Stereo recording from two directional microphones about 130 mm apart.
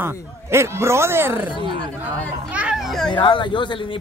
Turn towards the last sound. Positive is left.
turn(degrees=40)  # may be behind; listen again after turning